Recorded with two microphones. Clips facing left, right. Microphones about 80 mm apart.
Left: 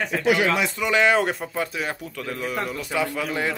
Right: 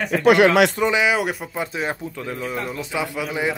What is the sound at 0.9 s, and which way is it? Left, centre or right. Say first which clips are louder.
Speech: even; centre.